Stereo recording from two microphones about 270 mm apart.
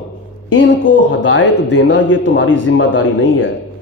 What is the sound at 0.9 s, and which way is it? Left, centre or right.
A man's voice, left.